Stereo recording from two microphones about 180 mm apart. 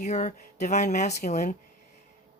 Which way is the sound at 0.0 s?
40° left (ahead or behind).